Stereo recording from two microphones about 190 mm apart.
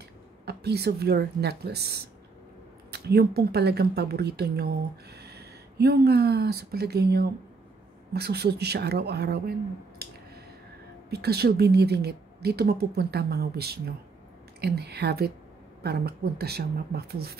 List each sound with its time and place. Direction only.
0.5 s a woman's voice: 60° right (ahead or behind)
11.1 s a woman's voice: 60° right (ahead or behind)